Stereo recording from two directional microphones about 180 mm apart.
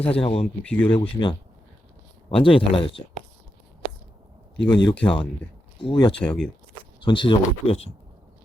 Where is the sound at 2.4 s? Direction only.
30° left (ahead or behind).